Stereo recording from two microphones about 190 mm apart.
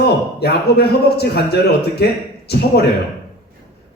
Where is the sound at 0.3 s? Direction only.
55° left (ahead or behind).